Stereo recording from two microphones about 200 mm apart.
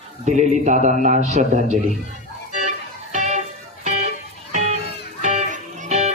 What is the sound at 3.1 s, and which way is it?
Music, 35° right (ahead or behind).